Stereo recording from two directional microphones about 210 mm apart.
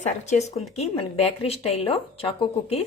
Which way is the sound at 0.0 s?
35° left (ahead or behind).